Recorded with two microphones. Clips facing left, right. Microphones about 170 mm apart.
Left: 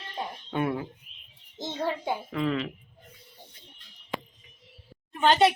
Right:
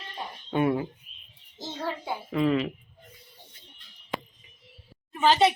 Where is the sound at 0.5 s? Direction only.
5° right (ahead or behind).